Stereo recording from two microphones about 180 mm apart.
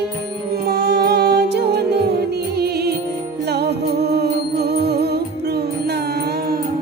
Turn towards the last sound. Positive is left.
turn(degrees=-65)  # may be behind; listen again after turning